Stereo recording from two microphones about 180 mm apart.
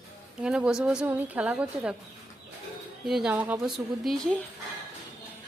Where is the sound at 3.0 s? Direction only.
5° right (ahead or behind).